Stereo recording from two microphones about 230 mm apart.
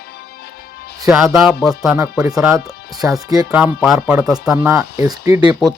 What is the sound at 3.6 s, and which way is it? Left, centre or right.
Speech, centre.